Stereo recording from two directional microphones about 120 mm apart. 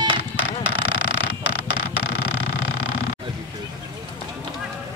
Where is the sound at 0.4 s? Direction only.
10° right (ahead or behind).